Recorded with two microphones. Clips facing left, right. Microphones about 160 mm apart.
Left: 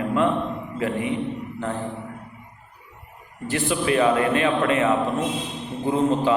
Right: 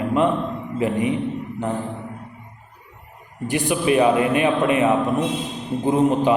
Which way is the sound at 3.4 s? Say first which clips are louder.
Right 3 dB; 15° right (ahead or behind).